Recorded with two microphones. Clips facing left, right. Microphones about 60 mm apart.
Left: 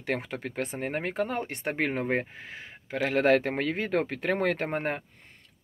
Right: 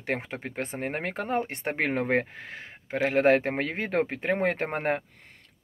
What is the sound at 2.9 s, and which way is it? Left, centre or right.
Speech, right.